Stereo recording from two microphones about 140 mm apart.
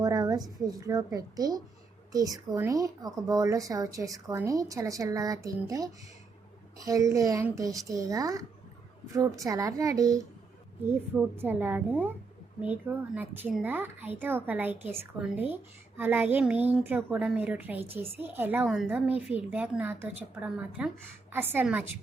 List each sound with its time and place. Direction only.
0.0 s a sound: 25° right (ahead or behind)
0.6 s speech: 25° right (ahead or behind)
11.1 s a woman's voice: 15° right (ahead or behind)
18.6 s a woman's voice: centre (ahead or behind)
18.9 s a woman's voice: 10° right (ahead or behind)